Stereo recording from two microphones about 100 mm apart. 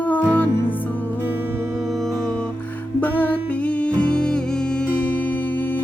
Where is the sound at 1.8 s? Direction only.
Centre (ahead or behind).